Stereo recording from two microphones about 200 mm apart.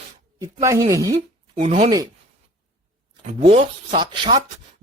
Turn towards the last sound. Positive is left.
turn(degrees=-25)  # may be behind; listen again after turning